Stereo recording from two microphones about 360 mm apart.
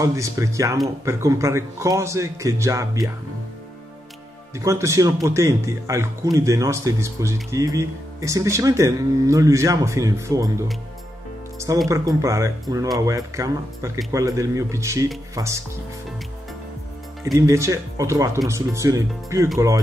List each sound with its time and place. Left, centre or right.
0.0 s speech: centre
4.6 s speech: centre
17.2 s speech: centre